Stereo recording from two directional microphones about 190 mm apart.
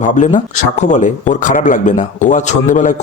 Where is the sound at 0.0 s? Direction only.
40° left (ahead or behind).